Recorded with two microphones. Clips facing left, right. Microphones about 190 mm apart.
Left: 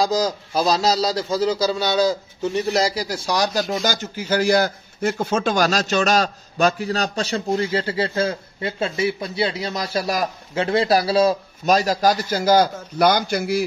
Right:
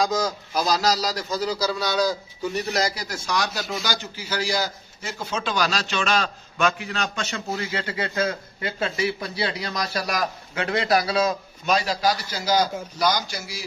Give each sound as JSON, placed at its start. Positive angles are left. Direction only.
{"t": 0.0, "sound": "a man's voice", "side_deg": 30}